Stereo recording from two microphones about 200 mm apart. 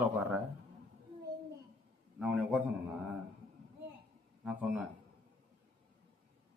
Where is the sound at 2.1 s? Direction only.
5° right (ahead or behind).